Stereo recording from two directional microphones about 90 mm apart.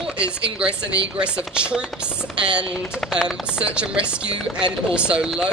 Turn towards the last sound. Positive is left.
turn(degrees=-10)  # may be behind; listen again after turning